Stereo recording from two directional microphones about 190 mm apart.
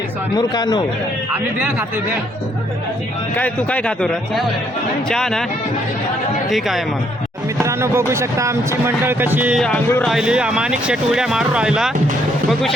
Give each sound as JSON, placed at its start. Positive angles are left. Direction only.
{"t": 0.3, "sound": "speech", "side_deg": 20}
{"t": 3.3, "sound": "speech", "side_deg": 10}
{"t": 6.5, "sound": "speech", "side_deg": 0}
{"t": 7.6, "sound": "speech", "side_deg": -15}
{"t": 9.6, "sound": "speech", "side_deg": 5}